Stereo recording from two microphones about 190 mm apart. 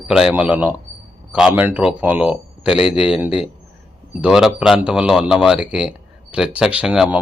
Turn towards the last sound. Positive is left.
turn(degrees=-5)  # may be behind; listen again after turning